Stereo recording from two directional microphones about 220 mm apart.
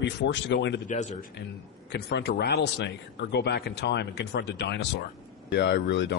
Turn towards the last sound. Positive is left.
turn(degrees=55)  # may be behind; listen again after turning